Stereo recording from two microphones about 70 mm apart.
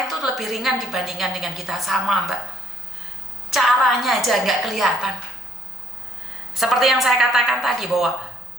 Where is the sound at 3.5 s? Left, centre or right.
Centre.